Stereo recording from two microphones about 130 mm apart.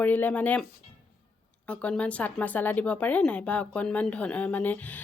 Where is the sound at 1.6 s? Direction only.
10° left (ahead or behind).